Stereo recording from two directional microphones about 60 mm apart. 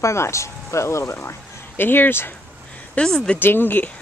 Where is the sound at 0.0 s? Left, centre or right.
Left.